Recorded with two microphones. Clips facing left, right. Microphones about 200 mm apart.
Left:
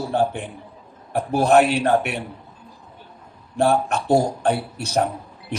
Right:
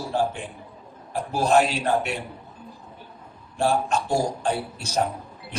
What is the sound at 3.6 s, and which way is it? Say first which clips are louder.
Speech: left 3 dB; 60° left (ahead or behind).